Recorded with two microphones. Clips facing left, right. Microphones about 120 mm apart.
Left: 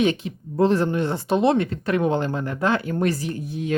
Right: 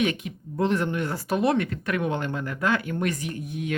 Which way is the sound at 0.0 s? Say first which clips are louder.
Left 4 dB; 30° left (ahead or behind).